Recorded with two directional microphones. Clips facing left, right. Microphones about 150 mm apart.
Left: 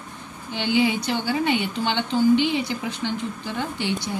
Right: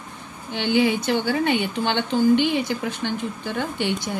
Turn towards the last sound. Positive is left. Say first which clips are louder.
# right 2 dB
turn(degrees=-55)  # may be behind; listen again after turning